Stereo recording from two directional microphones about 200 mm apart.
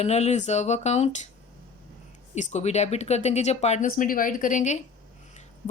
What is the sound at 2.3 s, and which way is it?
Speech, 35° left (ahead or behind).